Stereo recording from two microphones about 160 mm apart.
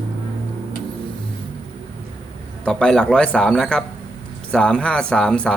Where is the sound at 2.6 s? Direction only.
5° left (ahead or behind).